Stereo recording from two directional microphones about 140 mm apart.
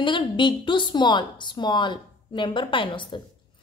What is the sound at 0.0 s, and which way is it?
A woman's voice, 35° left (ahead or behind).